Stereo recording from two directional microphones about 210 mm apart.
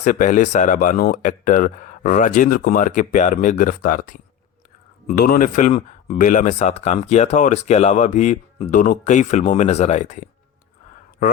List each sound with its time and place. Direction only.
0.0 s speech: 35° left (ahead or behind)